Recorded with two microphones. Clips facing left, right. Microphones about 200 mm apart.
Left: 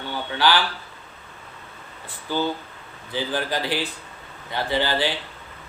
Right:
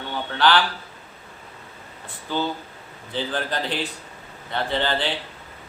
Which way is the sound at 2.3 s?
10° left (ahead or behind).